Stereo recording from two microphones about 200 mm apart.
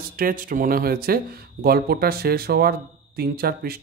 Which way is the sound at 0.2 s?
45° right (ahead or behind).